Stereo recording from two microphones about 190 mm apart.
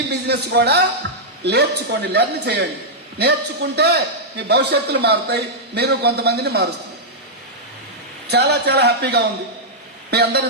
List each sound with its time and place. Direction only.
0.3 s a man's voice: 60° right (ahead or behind)
1.0 s a sound: 65° right (ahead or behind)
1.5 s a man's voice: 60° right (ahead or behind)
8.3 s a man's voice: 60° right (ahead or behind)